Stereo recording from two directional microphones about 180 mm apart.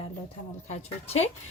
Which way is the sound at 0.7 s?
35° left (ahead or behind).